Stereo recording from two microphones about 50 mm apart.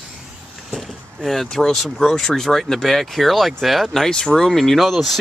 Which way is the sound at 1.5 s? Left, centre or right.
Centre.